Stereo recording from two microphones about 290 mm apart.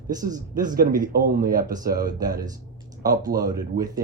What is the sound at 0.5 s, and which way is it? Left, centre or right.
Speech, right.